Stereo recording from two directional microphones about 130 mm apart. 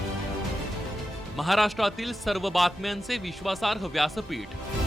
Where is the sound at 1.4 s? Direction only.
Centre (ahead or behind).